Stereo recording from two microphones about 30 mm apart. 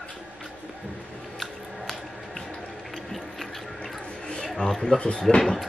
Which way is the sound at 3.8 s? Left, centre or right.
Left.